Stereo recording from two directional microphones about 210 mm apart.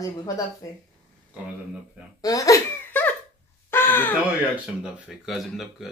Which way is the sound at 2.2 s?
15° left (ahead or behind).